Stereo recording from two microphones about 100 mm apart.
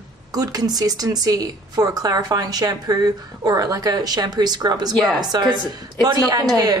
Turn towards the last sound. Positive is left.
turn(degrees=-40)  # may be behind; listen again after turning